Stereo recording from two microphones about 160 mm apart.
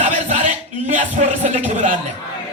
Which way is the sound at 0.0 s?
45° right (ahead or behind).